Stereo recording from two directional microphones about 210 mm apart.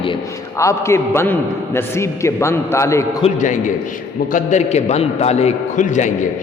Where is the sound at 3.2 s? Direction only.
35° left (ahead or behind).